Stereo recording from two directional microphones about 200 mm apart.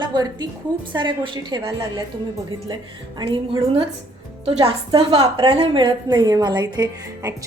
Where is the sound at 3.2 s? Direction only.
25° right (ahead or behind).